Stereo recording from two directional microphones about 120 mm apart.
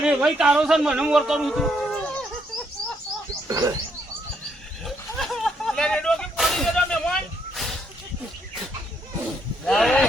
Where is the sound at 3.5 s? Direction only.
30° right (ahead or behind).